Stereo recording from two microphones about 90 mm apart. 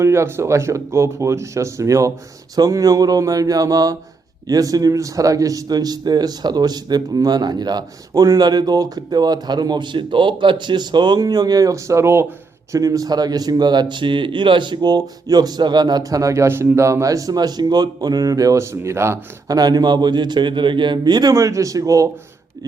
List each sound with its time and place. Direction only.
0.0 s a man's voice: 30° right (ahead or behind)
12.7 s a man's voice: 40° right (ahead or behind)
19.5 s a man's voice: 45° right (ahead or behind)
21.3 s speech: 35° right (ahead or behind)